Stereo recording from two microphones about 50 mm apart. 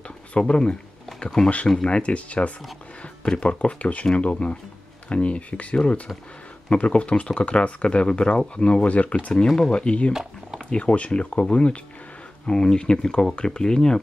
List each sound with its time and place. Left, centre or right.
0.4 s speech: centre
1.9 s speech: left